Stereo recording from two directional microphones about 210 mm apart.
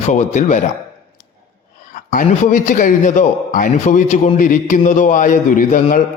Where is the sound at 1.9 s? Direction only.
40° left (ahead or behind).